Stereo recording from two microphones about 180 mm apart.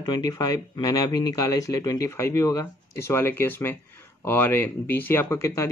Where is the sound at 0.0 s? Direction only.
20° left (ahead or behind).